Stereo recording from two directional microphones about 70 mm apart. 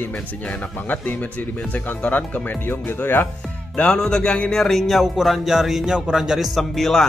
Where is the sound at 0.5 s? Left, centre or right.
Left.